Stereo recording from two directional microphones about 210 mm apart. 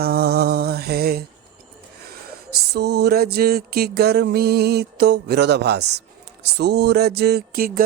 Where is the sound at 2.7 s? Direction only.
55° right (ahead or behind).